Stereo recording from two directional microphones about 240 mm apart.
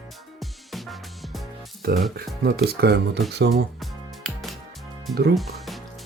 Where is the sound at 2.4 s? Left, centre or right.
Right.